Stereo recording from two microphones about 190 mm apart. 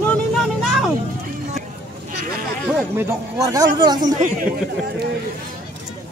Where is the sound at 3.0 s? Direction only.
15° right (ahead or behind).